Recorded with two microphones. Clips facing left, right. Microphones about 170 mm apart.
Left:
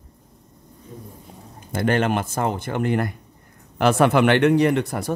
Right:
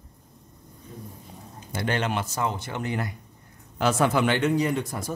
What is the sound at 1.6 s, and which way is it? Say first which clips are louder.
Speech: left 7 dB; 50° left (ahead or behind).